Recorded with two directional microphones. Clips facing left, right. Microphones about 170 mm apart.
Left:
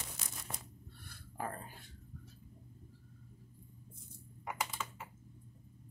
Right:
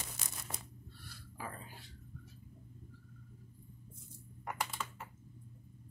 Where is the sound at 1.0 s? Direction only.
55° left (ahead or behind).